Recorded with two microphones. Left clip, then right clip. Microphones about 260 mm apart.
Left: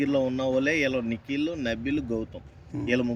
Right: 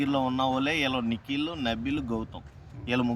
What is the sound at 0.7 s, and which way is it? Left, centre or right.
Speech, right.